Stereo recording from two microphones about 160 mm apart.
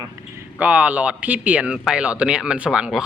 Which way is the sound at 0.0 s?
20° right (ahead or behind).